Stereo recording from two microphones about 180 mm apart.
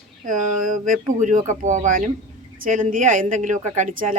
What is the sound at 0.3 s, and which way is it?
Speech, 45° right (ahead or behind).